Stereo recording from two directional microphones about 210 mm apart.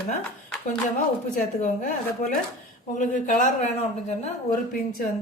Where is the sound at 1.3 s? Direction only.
35° left (ahead or behind).